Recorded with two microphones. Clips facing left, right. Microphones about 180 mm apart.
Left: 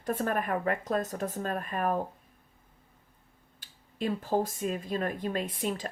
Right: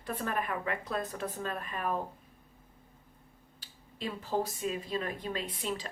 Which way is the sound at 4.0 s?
50° left (ahead or behind).